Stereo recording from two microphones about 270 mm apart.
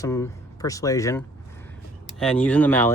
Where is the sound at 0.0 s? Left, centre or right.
Centre.